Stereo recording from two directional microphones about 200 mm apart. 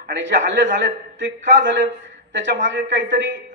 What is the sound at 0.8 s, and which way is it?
A woman's voice, 65° right (ahead or behind).